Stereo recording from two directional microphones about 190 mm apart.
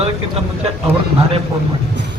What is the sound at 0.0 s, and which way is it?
Speech, 30° right (ahead or behind).